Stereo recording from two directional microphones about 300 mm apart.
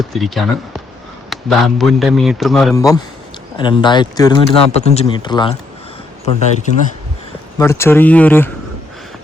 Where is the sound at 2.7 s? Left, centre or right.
Centre.